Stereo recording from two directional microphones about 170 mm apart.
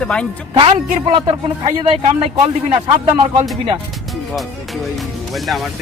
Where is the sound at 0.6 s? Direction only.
30° right (ahead or behind).